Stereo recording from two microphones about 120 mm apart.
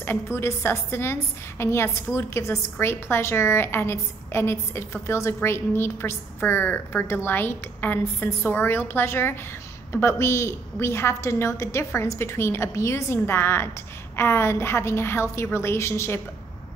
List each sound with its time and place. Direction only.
0.0 s a woman's voice: 20° left (ahead or behind)